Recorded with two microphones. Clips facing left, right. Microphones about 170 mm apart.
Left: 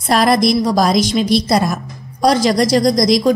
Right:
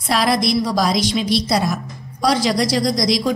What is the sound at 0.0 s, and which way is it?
A woman's voice, 50° left (ahead or behind).